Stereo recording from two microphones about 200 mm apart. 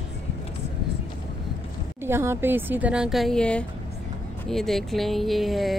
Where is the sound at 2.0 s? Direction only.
10° right (ahead or behind).